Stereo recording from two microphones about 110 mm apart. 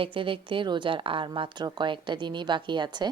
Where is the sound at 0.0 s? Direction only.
50° right (ahead or behind).